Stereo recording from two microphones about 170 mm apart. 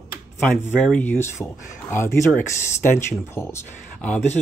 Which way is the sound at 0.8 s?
10° left (ahead or behind).